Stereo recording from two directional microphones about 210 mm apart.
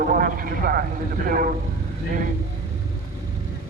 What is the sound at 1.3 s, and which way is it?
Speech, 40° right (ahead or behind).